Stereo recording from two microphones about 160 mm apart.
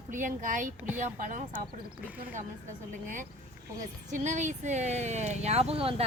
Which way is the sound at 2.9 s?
55° right (ahead or behind).